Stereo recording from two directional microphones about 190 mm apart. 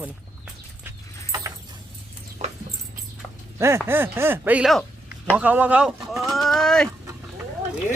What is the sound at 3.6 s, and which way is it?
Speech, 15° right (ahead or behind).